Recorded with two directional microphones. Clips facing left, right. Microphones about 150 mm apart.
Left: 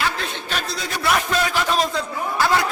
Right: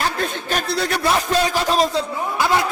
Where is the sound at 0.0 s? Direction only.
45° right (ahead or behind).